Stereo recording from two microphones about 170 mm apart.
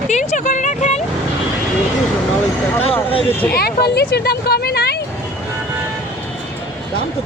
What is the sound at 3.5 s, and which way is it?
Speech, 65° left (ahead or behind).